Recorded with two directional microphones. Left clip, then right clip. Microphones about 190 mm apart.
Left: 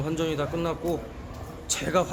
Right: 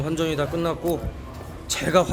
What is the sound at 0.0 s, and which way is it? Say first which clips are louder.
Speech: right 3 dB; 10° right (ahead or behind).